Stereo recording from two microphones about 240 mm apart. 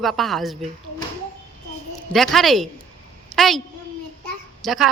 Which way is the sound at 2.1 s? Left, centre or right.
Centre.